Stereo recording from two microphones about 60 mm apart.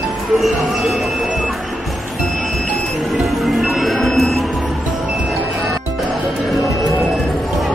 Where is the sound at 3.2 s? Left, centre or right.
Centre.